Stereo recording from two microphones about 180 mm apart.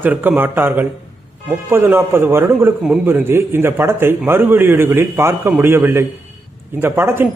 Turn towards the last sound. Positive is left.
turn(degrees=-10)  # may be behind; listen again after turning